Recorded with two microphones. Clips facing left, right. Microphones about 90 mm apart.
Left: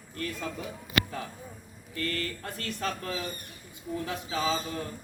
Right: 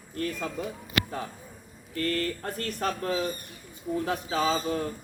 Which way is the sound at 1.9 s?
35° right (ahead or behind).